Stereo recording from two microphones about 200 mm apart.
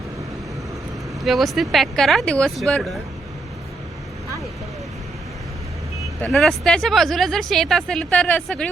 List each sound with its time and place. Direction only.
1.2 s speech: centre (ahead or behind)
6.3 s speech: centre (ahead or behind)